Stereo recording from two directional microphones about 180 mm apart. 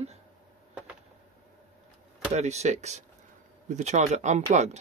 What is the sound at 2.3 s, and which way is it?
Speech, 40° right (ahead or behind).